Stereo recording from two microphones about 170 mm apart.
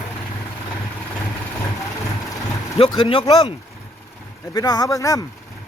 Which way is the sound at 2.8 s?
30° left (ahead or behind).